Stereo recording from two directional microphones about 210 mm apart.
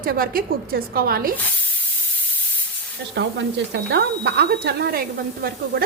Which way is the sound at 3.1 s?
55° right (ahead or behind).